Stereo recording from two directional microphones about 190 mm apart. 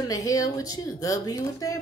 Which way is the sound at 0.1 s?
20° left (ahead or behind).